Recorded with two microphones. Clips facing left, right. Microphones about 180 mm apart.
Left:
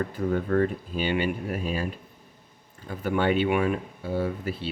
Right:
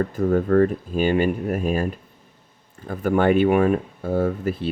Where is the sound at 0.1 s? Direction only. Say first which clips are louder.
Right 6 dB; 45° right (ahead or behind).